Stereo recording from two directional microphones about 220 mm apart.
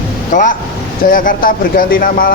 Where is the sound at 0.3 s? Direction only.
35° left (ahead or behind).